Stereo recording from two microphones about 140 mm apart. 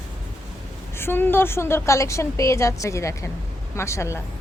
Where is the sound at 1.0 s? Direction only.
15° left (ahead or behind).